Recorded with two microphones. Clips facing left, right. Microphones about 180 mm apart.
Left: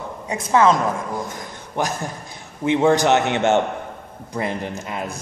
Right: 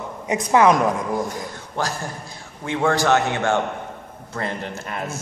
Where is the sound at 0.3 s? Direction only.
15° right (ahead or behind).